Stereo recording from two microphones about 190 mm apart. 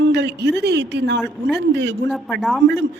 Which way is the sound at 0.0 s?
65° right (ahead or behind).